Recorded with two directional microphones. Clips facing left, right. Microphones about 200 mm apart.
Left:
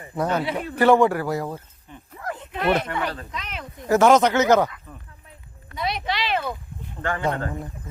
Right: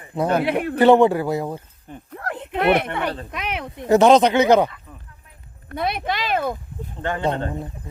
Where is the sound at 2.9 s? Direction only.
25° right (ahead or behind).